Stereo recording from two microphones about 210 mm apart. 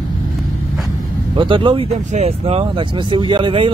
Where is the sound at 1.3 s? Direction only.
25° right (ahead or behind).